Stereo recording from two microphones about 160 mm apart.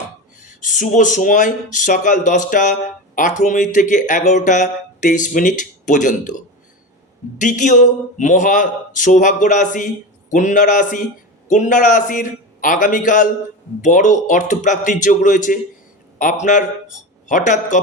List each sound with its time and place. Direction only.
0.4 s speech: 50° left (ahead or behind)
7.3 s a man's voice: 50° left (ahead or behind)